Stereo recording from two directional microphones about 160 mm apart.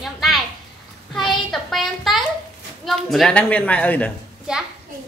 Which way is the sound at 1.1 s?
Centre (ahead or behind).